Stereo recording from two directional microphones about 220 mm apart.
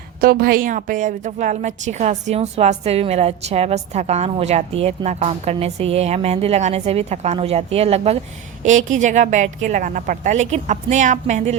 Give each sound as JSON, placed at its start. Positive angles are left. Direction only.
{"t": 0.2, "sound": "a woman's voice", "side_deg": -40}